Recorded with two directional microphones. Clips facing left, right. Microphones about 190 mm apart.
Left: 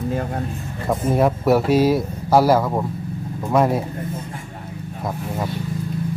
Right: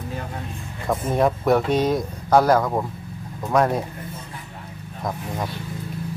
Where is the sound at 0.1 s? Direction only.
45° left (ahead or behind).